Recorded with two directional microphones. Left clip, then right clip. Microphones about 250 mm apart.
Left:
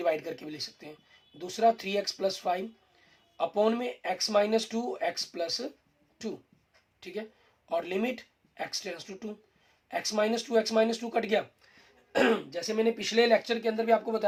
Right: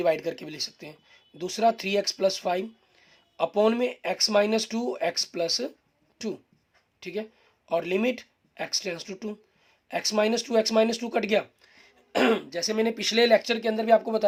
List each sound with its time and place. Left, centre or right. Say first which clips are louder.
0.0 s speech: right 5 dB; right